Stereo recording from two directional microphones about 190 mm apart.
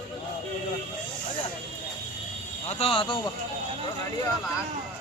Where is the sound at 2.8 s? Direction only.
30° left (ahead or behind).